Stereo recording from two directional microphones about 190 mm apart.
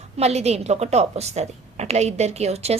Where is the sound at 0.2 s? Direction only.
35° right (ahead or behind).